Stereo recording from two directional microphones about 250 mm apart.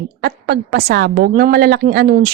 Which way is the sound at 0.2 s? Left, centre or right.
Right.